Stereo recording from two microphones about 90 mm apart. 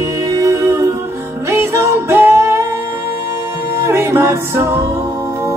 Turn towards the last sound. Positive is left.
turn(degrees=-30)  # may be behind; listen again after turning